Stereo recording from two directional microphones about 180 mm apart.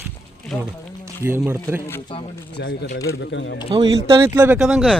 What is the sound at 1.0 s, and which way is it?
Speech, 10° right (ahead or behind).